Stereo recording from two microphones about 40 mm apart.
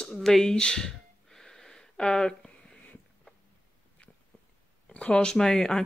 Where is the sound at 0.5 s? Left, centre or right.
Centre.